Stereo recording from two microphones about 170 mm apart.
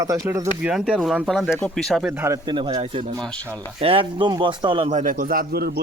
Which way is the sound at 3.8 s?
30° right (ahead or behind).